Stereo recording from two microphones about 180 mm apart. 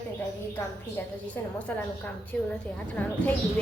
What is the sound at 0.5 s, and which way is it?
A woman's voice, 10° left (ahead or behind).